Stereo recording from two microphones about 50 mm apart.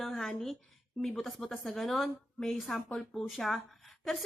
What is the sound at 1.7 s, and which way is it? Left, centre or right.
A woman's voice, centre.